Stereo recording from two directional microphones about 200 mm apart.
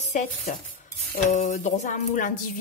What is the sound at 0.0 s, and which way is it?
Speech, 35° left (ahead or behind).